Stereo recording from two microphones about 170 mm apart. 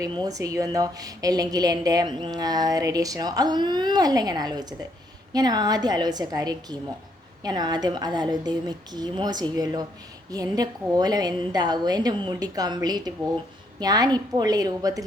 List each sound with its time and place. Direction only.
0.0 s a woman's voice: 20° right (ahead or behind)